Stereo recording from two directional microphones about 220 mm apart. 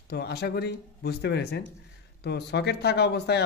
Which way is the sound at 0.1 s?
45° left (ahead or behind).